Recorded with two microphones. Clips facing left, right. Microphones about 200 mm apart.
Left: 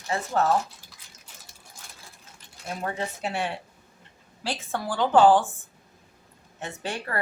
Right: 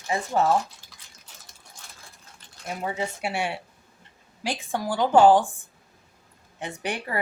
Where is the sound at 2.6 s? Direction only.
10° right (ahead or behind).